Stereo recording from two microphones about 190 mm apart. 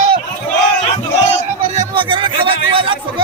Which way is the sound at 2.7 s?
30° right (ahead or behind).